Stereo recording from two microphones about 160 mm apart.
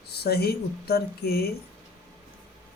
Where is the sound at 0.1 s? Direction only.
85° left.